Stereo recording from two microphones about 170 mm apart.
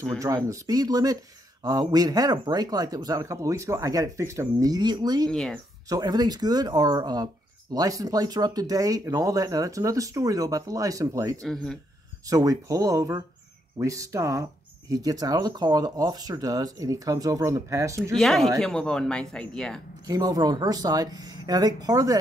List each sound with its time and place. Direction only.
0.5 s speech: 20° right (ahead or behind)
5.3 s speech: 5° left (ahead or behind)
5.9 s speech: 25° right (ahead or behind)
11.4 s speech: 5° left (ahead or behind)
12.3 s speech: 20° right (ahead or behind)
18.1 s speech: centre (ahead or behind)
20.1 s speech: 25° right (ahead or behind)